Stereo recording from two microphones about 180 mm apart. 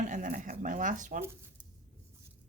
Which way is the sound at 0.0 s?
45° right (ahead or behind).